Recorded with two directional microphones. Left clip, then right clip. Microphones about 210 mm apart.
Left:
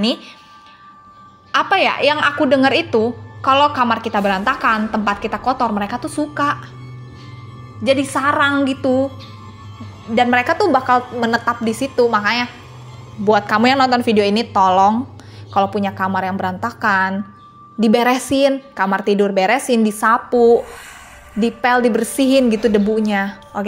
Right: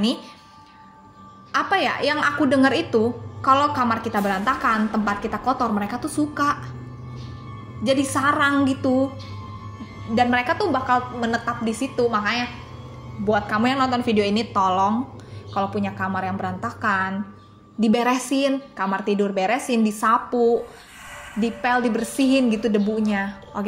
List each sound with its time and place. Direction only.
1.5 s a woman's voice: 25° left (ahead or behind)
7.8 s a woman's voice: 25° left (ahead or behind)
10.1 s a woman's voice: 35° left (ahead or behind)
23.5 s speech: 25° left (ahead or behind)